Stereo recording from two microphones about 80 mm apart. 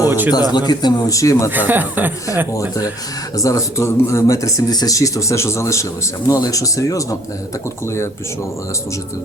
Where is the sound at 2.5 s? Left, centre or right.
Left.